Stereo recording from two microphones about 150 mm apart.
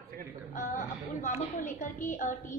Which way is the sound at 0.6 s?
55° left (ahead or behind).